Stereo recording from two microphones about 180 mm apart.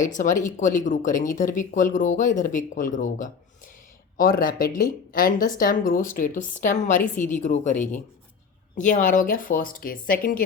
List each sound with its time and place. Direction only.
0.0 s speech: 45° left (ahead or behind)